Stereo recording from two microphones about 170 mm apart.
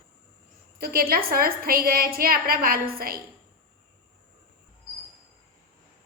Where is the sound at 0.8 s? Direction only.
60° right (ahead or behind).